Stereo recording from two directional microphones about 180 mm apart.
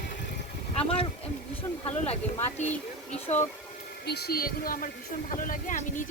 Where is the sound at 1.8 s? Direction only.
35° left (ahead or behind).